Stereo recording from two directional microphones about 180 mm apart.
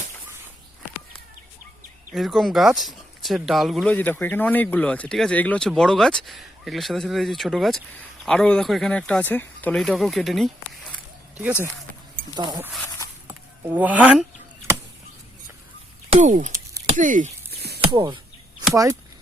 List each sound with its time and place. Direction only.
2.1 s speech: centre (ahead or behind)
12.4 s speech: 20° right (ahead or behind)
16.0 s speech: 40° right (ahead or behind)
17.7 s a sound: 25° right (ahead or behind)
18.7 s speech: 15° right (ahead or behind)